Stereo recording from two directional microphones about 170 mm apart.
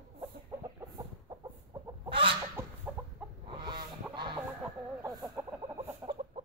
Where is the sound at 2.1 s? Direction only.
30° right (ahead or behind).